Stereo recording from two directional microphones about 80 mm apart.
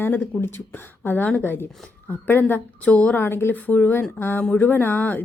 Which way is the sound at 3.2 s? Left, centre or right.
Left.